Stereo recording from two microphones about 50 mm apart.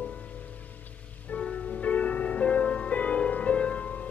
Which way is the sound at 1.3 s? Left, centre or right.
Left.